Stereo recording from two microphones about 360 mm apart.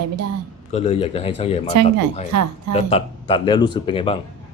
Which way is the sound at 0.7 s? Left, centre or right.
Centre.